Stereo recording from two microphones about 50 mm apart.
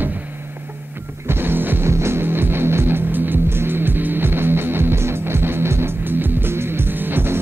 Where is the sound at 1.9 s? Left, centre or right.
Right.